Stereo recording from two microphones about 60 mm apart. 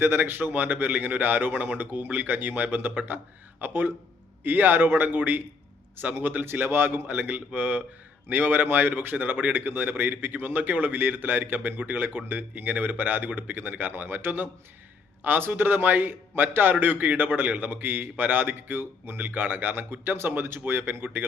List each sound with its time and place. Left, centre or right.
0.0 s a man's voice: right
7.1 s a man's voice: right